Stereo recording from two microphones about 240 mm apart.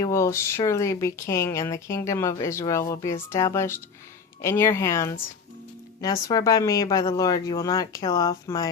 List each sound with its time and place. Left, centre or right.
0.0 s speech: centre